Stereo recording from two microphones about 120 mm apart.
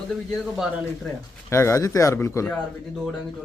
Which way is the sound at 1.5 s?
25° left (ahead or behind).